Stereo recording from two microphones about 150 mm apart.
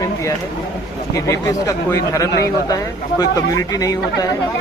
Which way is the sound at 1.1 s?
20° left (ahead or behind).